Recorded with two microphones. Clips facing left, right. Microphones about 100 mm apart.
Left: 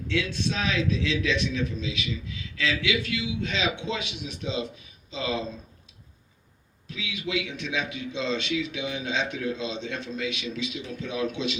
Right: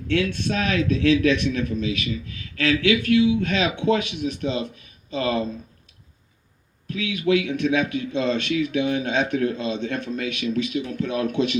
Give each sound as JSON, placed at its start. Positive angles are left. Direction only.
{"t": 0.1, "sound": "a man's voice", "side_deg": -55}
{"t": 6.8, "sound": "a man's voice", "side_deg": -55}